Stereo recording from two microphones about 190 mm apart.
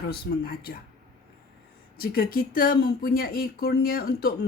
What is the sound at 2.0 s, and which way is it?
Speech, 50° left (ahead or behind).